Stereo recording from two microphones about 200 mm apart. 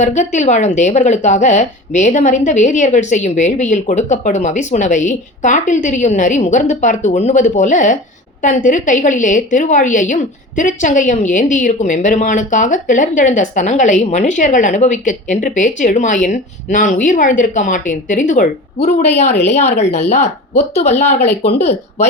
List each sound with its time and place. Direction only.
0.0 s a woman's voice: 35° left (ahead or behind)